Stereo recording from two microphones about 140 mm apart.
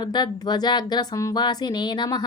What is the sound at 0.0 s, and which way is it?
Speech, 30° left (ahead or behind).